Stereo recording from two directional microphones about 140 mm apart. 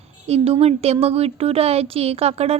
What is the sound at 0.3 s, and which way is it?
Speech, 45° right (ahead or behind).